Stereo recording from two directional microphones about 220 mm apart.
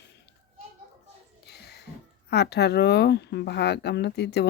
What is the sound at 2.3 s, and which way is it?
Speech, 50° left (ahead or behind).